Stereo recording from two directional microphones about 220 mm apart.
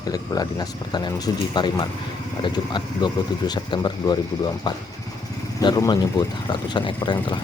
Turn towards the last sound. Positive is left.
turn(degrees=20)  # may be behind; listen again after turning